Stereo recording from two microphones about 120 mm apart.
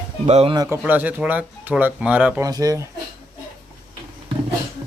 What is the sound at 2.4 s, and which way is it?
Speech, 30° right (ahead or behind).